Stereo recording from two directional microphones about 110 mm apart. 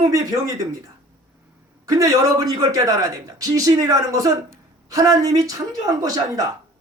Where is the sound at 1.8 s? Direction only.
30° right (ahead or behind).